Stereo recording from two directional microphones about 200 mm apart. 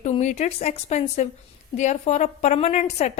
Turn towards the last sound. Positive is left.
turn(degrees=35)  # may be behind; listen again after turning